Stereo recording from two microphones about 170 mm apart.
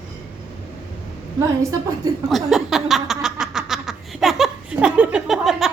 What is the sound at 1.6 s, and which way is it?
Speech, 20° right (ahead or behind).